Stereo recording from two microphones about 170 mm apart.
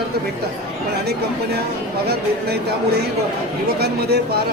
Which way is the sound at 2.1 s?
70° right (ahead or behind).